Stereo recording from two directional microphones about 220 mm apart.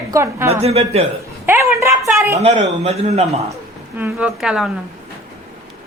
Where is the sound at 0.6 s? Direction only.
30° right (ahead or behind).